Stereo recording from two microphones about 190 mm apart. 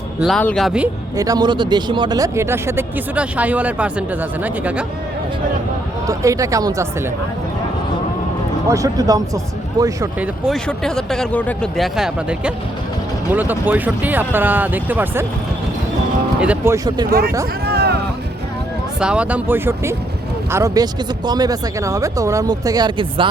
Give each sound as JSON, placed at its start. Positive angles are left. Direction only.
{"t": 0.2, "sound": "speech", "side_deg": 5}
{"t": 1.1, "sound": "speech", "side_deg": -20}
{"t": 6.1, "sound": "speech", "side_deg": -15}
{"t": 8.7, "sound": "speech", "side_deg": -20}
{"t": 10.4, "sound": "speech", "side_deg": 0}
{"t": 16.4, "sound": "speech", "side_deg": -10}
{"t": 17.1, "sound": "speech", "side_deg": -55}
{"t": 17.7, "sound": "music", "side_deg": -60}
{"t": 18.9, "sound": "speech", "side_deg": -5}